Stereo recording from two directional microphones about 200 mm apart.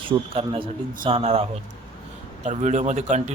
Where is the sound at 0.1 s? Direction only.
30° right (ahead or behind).